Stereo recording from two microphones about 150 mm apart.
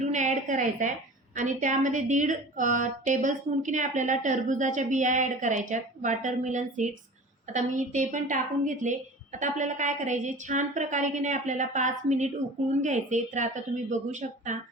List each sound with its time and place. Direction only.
0.0 s a woman's voice: 50° right (ahead or behind)